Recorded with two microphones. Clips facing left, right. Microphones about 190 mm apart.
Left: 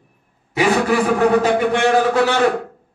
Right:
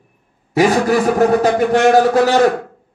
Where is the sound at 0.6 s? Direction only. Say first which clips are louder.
Right 3 dB; 40° right (ahead or behind).